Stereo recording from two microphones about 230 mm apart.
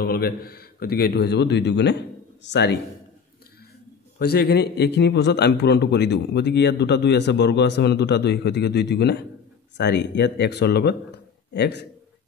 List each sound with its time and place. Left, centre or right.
0.0 s a man's voice: left
4.2 s a man's voice: left